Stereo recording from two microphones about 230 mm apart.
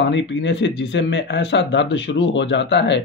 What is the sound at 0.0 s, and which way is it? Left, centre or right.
Speech, left.